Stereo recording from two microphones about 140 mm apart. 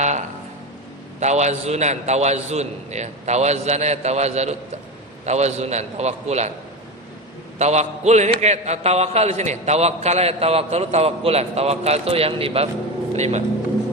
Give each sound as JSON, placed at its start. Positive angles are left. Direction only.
{"t": 0.0, "sound": "a sound", "side_deg": -55}
{"t": 1.2, "sound": "a man's voice", "side_deg": -55}
{"t": 7.6, "sound": "a man's voice", "side_deg": -55}